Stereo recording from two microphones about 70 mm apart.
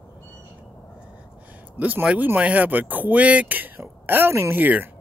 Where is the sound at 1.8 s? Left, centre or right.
Right.